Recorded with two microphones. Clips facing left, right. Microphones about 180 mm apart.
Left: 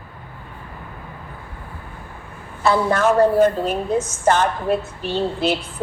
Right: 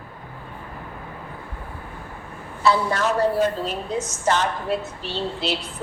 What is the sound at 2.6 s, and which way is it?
A woman's voice, 50° left (ahead or behind).